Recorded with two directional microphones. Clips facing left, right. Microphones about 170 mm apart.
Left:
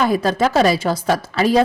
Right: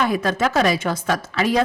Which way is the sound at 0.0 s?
35° left (ahead or behind).